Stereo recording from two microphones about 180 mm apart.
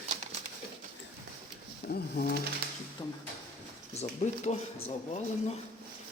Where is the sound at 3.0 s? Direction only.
25° left (ahead or behind).